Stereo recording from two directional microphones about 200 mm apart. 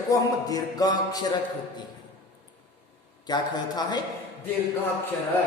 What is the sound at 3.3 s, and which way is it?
Speech, 20° left (ahead or behind).